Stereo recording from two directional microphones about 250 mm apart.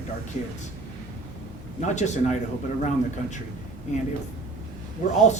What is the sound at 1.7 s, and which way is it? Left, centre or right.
Speech, left.